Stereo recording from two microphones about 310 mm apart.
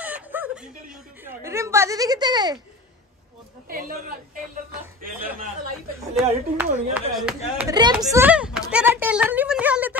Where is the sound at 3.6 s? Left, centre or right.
Right.